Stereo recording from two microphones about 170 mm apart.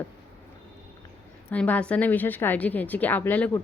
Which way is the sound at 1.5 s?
10° left (ahead or behind).